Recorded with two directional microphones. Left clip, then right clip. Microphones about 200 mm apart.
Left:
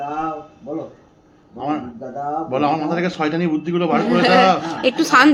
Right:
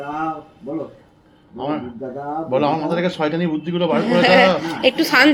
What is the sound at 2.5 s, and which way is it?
A man's voice, centre (ahead or behind).